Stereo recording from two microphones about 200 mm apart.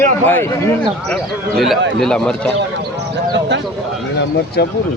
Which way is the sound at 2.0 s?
5° left (ahead or behind).